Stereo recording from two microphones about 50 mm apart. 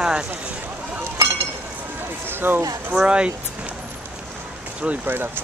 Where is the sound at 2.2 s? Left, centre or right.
Right.